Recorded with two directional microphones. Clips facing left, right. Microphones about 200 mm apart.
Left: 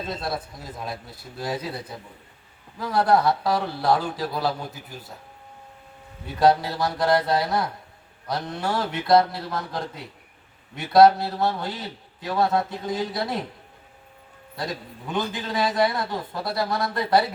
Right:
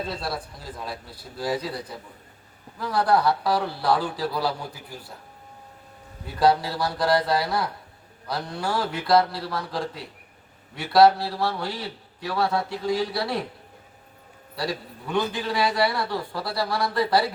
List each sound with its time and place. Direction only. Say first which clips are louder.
0.1 s a man's voice: left 1 dB; 20° left (ahead or behind)
6.4 s a man's voice: left 1 dB; 20° left (ahead or behind)
14.5 s a man's voice: right 2 dB; 20° left (ahead or behind)